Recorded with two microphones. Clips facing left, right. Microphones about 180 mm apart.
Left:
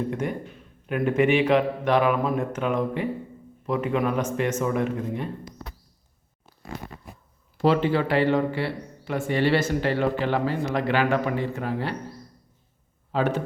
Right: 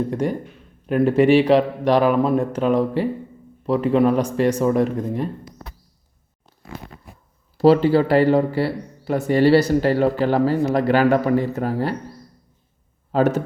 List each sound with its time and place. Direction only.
0.1 s speech: 35° right (ahead or behind)
7.6 s speech: 35° right (ahead or behind)
13.1 s speech: 40° right (ahead or behind)